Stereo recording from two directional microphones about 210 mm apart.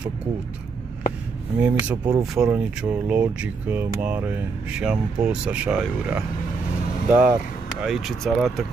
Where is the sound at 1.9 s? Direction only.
20° right (ahead or behind).